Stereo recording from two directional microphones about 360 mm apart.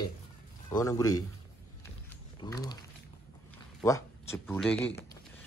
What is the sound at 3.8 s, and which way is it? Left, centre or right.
Speech, centre.